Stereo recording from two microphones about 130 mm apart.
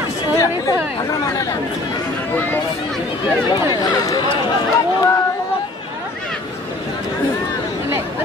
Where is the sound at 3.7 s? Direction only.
30° left (ahead or behind).